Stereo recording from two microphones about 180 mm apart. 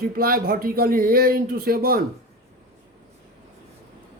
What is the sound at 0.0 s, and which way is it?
Speech, 55° right (ahead or behind).